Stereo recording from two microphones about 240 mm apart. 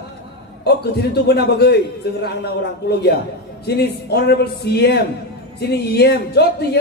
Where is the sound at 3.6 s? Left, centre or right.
Left.